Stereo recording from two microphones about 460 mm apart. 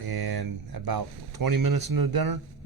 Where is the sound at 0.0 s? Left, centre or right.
Right.